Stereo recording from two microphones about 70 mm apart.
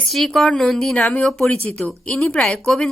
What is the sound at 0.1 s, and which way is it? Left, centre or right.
A woman's voice, centre.